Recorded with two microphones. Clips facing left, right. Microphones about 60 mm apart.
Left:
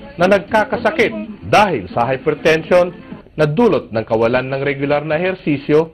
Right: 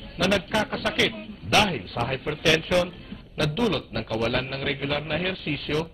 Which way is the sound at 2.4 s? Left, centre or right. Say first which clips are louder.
Left 9 dB; left.